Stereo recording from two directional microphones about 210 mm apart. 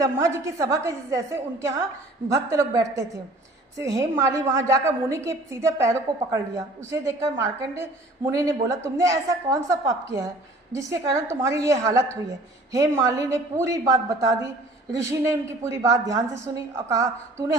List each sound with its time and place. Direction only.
0.0 s a woman's voice: 15° right (ahead or behind)